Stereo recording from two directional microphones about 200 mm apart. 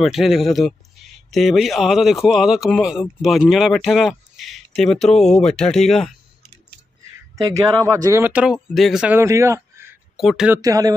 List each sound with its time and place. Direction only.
0.0 s a man's voice: centre (ahead or behind)
7.3 s speech: 15° right (ahead or behind)
10.1 s speech: centre (ahead or behind)
10.6 s speech: 20° right (ahead or behind)